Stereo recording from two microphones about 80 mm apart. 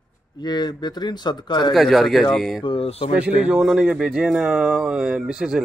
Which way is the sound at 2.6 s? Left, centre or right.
Left.